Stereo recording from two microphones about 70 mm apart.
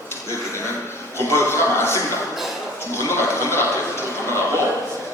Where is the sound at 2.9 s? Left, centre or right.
Left.